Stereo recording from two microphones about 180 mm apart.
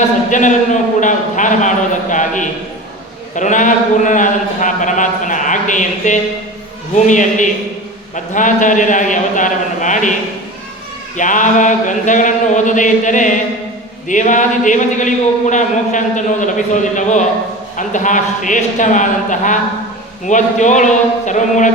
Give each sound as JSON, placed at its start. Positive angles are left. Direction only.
{"t": 0.3, "sound": "a sound", "side_deg": 45}
{"t": 7.1, "sound": "a man's voice", "side_deg": 45}
{"t": 11.2, "sound": "a man's voice", "side_deg": 45}